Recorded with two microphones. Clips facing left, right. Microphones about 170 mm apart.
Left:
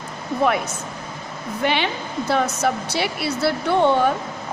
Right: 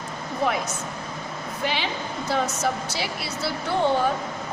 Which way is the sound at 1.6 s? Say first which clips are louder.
Left 6 dB; 65° left (ahead or behind).